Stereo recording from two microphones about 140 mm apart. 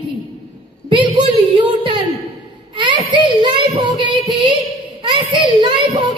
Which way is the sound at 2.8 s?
35° right (ahead or behind).